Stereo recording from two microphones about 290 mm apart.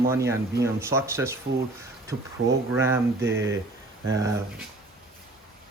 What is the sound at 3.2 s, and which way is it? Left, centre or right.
Speech, right.